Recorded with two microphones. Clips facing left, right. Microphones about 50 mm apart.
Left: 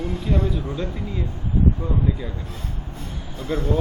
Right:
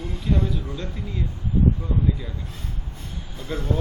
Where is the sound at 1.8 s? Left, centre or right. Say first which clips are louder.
Left 1 dB; centre.